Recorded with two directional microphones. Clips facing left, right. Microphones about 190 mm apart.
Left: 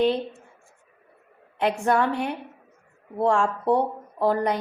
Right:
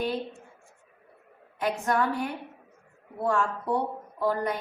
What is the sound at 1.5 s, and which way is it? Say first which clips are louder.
Speech: left 5 dB; 70° left (ahead or behind).